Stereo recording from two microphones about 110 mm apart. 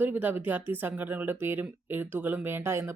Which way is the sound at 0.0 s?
15° right (ahead or behind).